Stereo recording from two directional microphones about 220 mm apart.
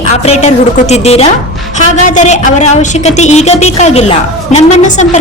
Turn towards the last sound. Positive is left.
turn(degrees=35)  # may be behind; listen again after turning